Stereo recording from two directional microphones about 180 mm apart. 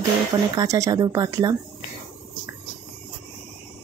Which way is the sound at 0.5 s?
20° right (ahead or behind).